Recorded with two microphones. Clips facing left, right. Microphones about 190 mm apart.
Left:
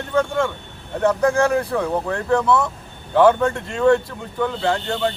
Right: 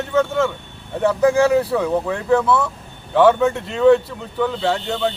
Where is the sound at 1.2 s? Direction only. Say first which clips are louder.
Right 6 dB; 5° right (ahead or behind).